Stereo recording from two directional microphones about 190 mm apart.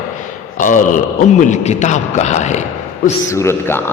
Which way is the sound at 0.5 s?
45° left (ahead or behind).